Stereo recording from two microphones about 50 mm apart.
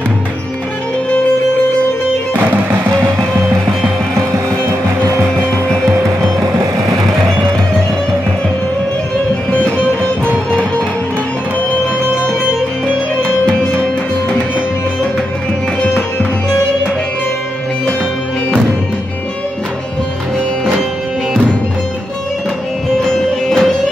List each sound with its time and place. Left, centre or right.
2.3 s music: right
2.9 s music: right
9.5 s music: left
23.0 s music: centre